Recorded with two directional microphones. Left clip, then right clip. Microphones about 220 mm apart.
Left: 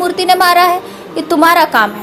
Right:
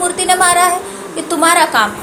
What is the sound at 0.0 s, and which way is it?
A woman's voice, 40° left (ahead or behind).